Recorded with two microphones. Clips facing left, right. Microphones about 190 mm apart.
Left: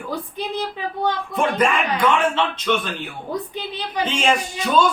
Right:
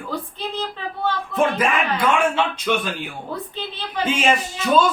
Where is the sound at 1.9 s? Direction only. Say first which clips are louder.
Even; 10° right (ahead or behind).